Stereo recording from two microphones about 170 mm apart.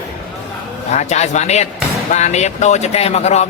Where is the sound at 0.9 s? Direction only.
40° left (ahead or behind).